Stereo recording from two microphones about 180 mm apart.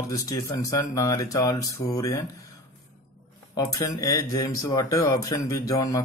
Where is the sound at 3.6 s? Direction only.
20° left (ahead or behind).